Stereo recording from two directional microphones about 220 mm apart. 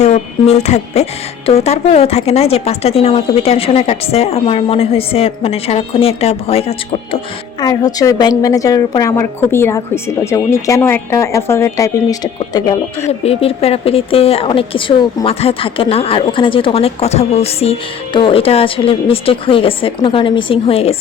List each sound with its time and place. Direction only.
0.0 s a woman's voice: 30° left (ahead or behind)
13.1 s speech: 25° left (ahead or behind)